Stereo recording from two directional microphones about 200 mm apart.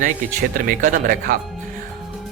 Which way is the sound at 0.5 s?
45° right (ahead or behind).